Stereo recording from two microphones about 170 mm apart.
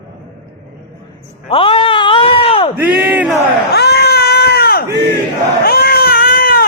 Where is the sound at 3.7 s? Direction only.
70° left (ahead or behind).